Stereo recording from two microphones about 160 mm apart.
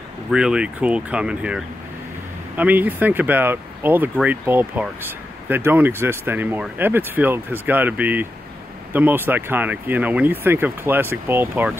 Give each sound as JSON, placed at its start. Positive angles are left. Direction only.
{"t": 0.3, "sound": "speech", "side_deg": -5}